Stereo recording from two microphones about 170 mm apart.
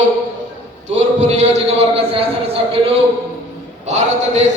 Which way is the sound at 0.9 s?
40° right (ahead or behind).